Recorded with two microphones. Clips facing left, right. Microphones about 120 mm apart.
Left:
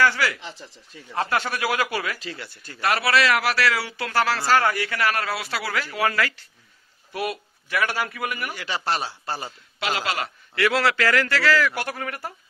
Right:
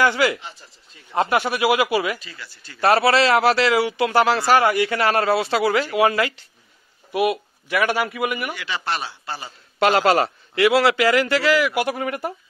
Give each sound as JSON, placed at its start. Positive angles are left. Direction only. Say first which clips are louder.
{"t": 0.0, "sound": "a man's voice", "louder": "right 3 dB", "side_deg": -20}
{"t": 2.1, "sound": "speech", "louder": "left 4 dB", "side_deg": 75}
{"t": 2.8, "sound": "a man's voice", "louder": "right 5 dB", "side_deg": -30}
{"t": 8.5, "sound": "a man's voice", "louder": "even", "side_deg": 40}
{"t": 9.8, "sound": "a man's voice", "louder": "right 10 dB", "side_deg": -45}
{"t": 10.5, "sound": "a man's voice", "louder": "right 5 dB", "side_deg": -15}